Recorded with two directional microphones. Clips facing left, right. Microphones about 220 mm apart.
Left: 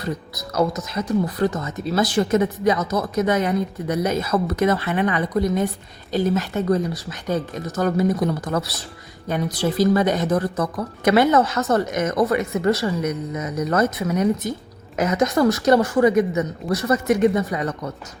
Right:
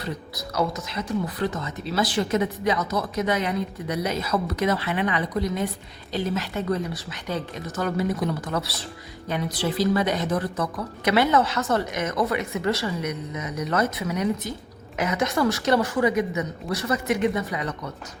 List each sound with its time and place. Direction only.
0.5 s a woman's voice: 45° left (ahead or behind)